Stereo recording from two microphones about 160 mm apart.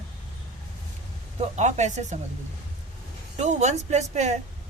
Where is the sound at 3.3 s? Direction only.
50° right (ahead or behind).